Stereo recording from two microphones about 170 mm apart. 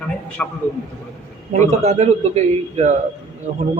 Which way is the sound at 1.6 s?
45° right (ahead or behind).